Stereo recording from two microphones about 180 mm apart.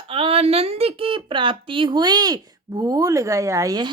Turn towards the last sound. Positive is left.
turn(degrees=-20)  # may be behind; listen again after turning